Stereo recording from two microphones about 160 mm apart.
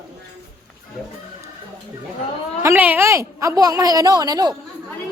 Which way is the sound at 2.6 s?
10° right (ahead or behind).